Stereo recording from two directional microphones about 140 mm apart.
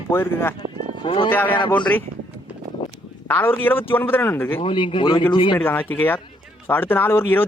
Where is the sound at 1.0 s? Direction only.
40° left (ahead or behind).